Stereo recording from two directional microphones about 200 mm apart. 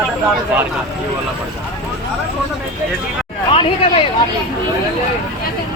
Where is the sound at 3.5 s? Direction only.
25° left (ahead or behind).